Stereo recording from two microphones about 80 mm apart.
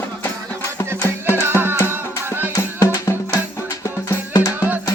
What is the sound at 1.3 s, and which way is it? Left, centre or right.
Music, right.